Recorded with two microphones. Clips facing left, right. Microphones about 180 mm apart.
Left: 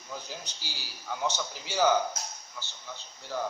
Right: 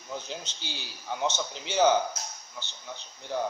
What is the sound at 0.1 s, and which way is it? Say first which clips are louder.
A man's voice: right 3 dB; 20° right (ahead or behind).